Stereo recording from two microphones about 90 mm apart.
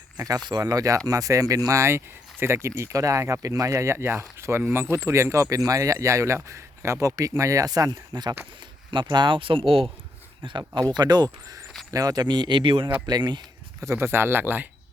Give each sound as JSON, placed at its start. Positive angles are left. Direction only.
{"t": 0.2, "sound": "speech", "side_deg": -45}
{"t": 10.4, "sound": "speech", "side_deg": -70}
{"t": 10.9, "sound": "speech", "side_deg": -50}
{"t": 13.1, "sound": "speech", "side_deg": -50}
{"t": 13.8, "sound": "speech", "side_deg": -30}